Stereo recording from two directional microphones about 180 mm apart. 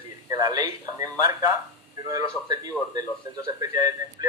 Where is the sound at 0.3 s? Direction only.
20° right (ahead or behind).